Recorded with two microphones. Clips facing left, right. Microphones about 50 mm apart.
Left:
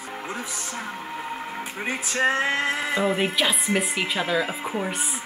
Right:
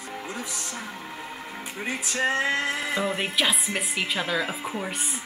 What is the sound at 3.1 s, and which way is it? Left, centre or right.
A woman's voice, centre.